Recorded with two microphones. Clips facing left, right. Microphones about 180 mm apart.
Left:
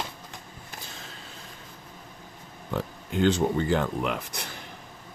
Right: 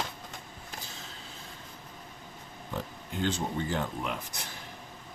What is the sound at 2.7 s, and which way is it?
Speech, 70° left (ahead or behind).